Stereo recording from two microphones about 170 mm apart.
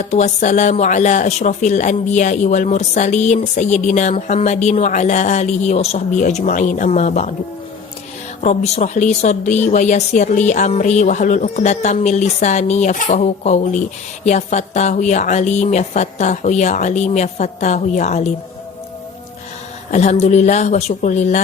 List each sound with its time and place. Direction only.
0.0 s speech: 45° left (ahead or behind)
8.4 s speech: 40° left (ahead or behind)
19.9 s speech: 40° left (ahead or behind)